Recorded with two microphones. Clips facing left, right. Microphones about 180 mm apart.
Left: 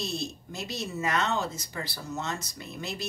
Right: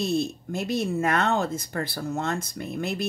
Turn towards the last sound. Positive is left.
turn(degrees=-55)  # may be behind; listen again after turning